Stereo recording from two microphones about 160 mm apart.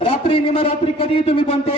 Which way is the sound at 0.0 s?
35° left (ahead or behind).